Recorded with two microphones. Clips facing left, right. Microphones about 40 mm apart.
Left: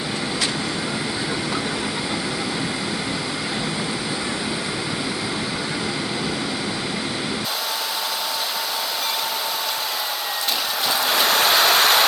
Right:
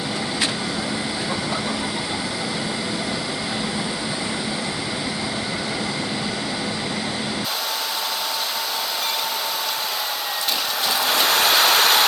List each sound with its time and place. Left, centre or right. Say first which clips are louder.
11.0 s vehicle: even; centre